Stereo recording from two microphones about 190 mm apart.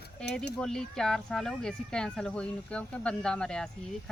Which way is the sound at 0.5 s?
5° left (ahead or behind).